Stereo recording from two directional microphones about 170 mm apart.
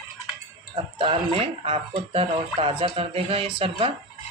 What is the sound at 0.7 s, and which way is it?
Speech, 35° right (ahead or behind).